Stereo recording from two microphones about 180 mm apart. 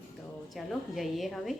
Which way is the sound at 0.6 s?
Centre (ahead or behind).